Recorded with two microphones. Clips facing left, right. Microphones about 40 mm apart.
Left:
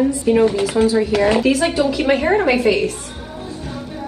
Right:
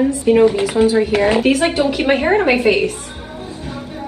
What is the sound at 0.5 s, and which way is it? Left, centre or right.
A woman's voice, centre.